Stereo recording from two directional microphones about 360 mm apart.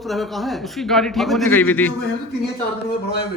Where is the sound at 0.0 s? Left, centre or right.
Centre.